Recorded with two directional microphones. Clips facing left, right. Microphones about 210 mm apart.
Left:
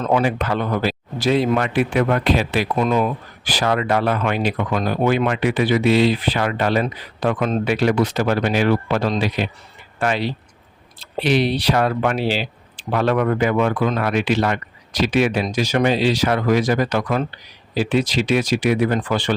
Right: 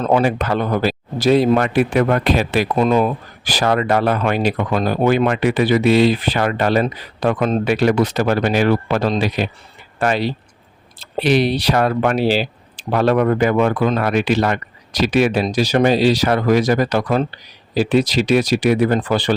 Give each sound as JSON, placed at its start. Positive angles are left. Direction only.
{"t": 0.0, "sound": "speech", "side_deg": -40}
{"t": 2.7, "sound": "speech", "side_deg": -35}